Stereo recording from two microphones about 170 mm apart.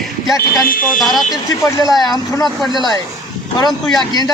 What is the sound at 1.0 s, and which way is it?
Speech, centre (ahead or behind).